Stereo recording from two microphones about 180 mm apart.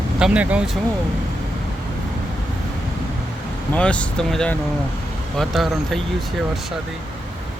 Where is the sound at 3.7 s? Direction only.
5° left (ahead or behind).